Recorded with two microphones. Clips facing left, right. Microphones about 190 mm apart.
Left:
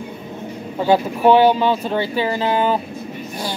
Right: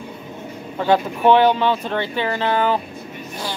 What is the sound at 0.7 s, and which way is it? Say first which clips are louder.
Speech: left 1 dB; 10° left (ahead or behind).